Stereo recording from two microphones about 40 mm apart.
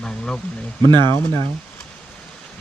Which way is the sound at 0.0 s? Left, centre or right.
Centre.